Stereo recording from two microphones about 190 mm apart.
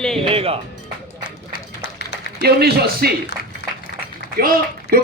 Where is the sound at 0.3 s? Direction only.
30° right (ahead or behind).